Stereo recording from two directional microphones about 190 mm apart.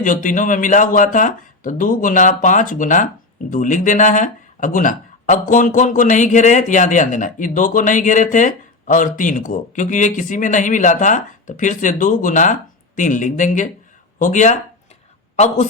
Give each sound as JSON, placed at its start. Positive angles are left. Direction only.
{"t": 0.0, "sound": "speech", "side_deg": 45}